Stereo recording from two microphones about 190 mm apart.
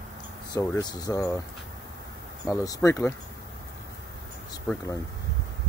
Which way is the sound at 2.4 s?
20° left (ahead or behind).